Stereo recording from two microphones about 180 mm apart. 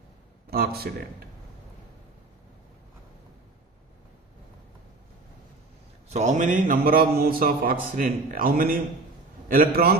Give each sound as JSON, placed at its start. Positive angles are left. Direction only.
{"t": 0.5, "sound": "a man's voice", "side_deg": -60}
{"t": 6.1, "sound": "a man's voice", "side_deg": -40}